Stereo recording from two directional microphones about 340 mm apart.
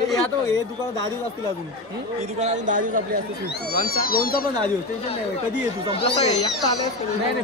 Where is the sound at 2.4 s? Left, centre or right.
Right.